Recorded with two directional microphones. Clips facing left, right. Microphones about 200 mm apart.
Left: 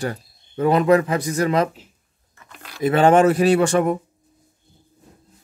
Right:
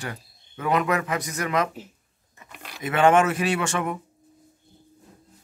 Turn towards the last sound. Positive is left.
turn(degrees=35)  # may be behind; listen again after turning